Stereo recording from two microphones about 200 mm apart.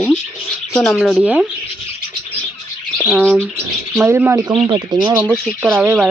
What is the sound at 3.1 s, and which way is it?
Speech, 5° right (ahead or behind).